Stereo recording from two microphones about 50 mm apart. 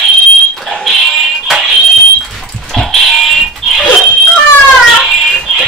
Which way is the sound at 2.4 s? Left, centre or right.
Centre.